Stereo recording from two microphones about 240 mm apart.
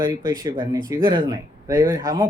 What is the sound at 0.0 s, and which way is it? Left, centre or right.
Speech, centre.